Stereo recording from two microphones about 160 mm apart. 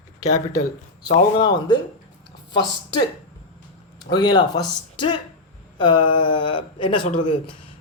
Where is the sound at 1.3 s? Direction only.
30° left (ahead or behind).